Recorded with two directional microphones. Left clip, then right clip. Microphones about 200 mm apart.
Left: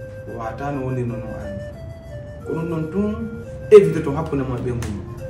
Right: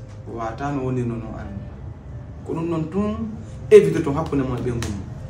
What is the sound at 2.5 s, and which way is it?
Speech, 15° right (ahead or behind).